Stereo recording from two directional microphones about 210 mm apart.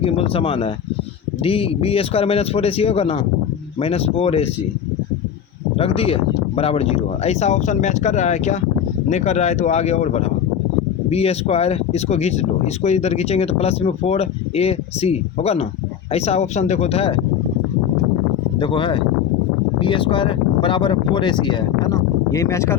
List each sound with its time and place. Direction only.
0.0 s speech: 25° left (ahead or behind)
5.7 s speech: 25° left (ahead or behind)
18.6 s speech: 25° left (ahead or behind)